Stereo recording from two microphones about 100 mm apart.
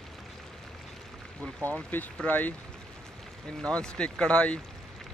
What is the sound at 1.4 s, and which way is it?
Speech, 10° left (ahead or behind).